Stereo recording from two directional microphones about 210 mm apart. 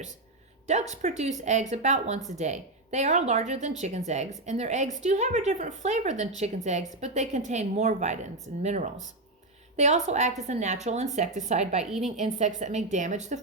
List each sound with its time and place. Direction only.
0.7 s a woman's voice: 35° right (ahead or behind)
11.9 s a woman's voice: centre (ahead or behind)
12.1 s a woman's voice: 35° right (ahead or behind)